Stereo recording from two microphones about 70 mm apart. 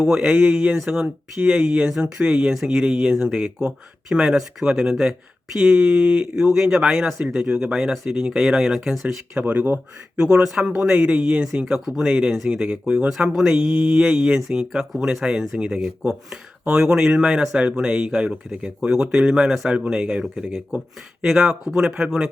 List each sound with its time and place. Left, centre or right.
0.0 s speech: centre
9.4 s speech: right
10.2 s speech: centre